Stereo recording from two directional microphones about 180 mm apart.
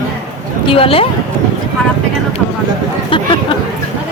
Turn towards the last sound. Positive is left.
turn(degrees=30)  # may be behind; listen again after turning